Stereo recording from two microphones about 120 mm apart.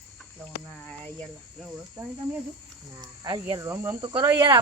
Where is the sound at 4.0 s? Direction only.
40° right (ahead or behind).